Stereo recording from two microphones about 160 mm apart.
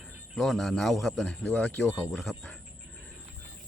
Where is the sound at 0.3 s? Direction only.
Centre (ahead or behind).